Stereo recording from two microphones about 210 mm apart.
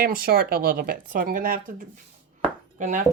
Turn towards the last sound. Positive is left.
turn(degrees=-35)  # may be behind; listen again after turning